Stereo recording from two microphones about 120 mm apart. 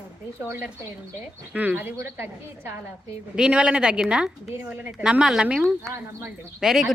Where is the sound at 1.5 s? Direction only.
15° right (ahead or behind).